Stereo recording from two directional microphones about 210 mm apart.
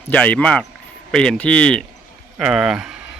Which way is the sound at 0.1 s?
5° left (ahead or behind).